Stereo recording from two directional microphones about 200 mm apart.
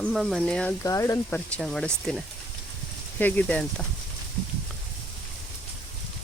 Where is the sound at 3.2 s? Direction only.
5° left (ahead or behind).